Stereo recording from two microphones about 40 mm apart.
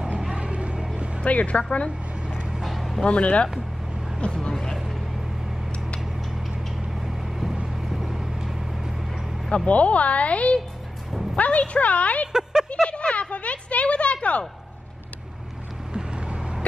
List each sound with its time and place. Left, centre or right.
0.3 s a sound: right
0.9 s vehicle: right
1.2 s a woman's voice: left
2.2 s vehicle: right
2.6 s a sound: centre
3.1 s speech: left
4.2 s speech: centre
7.0 s vehicle: centre
9.7 s a woman's voice: left
12.3 s a sound: centre
12.6 s a sound: left
15.9 s boat: right